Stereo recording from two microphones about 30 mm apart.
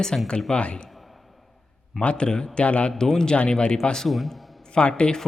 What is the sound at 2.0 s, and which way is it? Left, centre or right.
Speech, left.